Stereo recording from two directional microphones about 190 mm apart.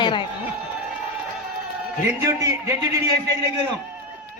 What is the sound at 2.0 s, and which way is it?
Speech, 15° right (ahead or behind).